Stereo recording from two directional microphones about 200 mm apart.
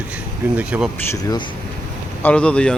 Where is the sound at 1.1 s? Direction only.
20° left (ahead or behind).